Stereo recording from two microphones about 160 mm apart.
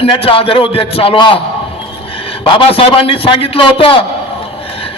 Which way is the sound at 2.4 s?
35° left (ahead or behind).